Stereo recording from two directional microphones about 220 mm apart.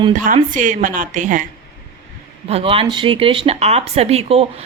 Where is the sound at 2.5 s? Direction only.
25° right (ahead or behind).